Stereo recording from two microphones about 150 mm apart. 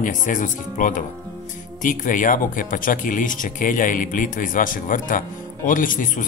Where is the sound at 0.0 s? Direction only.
60° left (ahead or behind).